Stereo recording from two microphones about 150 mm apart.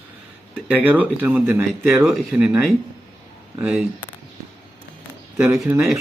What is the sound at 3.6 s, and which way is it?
Speech, 5° right (ahead or behind).